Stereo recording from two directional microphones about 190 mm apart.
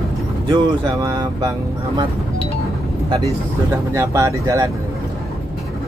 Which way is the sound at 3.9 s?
15° right (ahead or behind).